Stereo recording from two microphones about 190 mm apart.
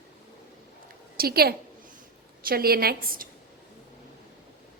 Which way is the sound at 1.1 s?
55° right (ahead or behind).